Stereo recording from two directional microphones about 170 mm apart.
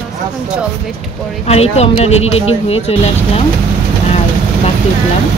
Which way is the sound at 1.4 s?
40° left (ahead or behind).